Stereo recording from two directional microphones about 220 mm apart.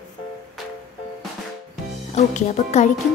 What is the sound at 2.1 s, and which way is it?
Speech, 30° left (ahead or behind).